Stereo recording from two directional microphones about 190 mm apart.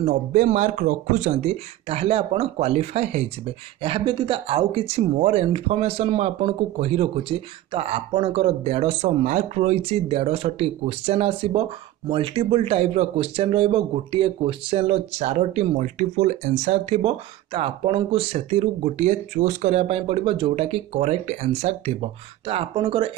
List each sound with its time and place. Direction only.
0.0 s speech: 40° right (ahead or behind)